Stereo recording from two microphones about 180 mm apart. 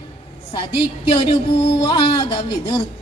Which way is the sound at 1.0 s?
30° left (ahead or behind).